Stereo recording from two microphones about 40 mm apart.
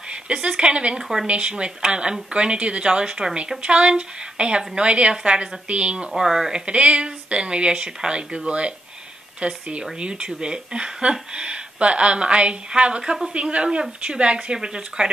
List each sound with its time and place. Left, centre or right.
0.1 s a woman's voice: right
6.1 s speech: centre
6.6 s speech: right
13.3 s speech: right